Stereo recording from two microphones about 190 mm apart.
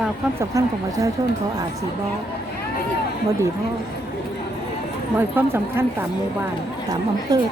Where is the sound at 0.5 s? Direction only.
15° right (ahead or behind).